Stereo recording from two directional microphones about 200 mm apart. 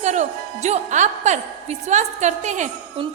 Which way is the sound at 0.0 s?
35° right (ahead or behind).